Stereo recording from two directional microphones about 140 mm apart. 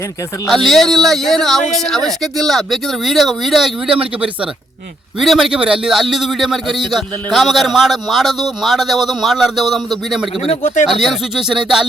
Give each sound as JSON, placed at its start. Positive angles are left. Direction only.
{"t": 0.4, "sound": "a man's voice", "side_deg": 0}
{"t": 10.5, "sound": "speech", "side_deg": 60}
{"t": 10.8, "sound": "a man's voice", "side_deg": 0}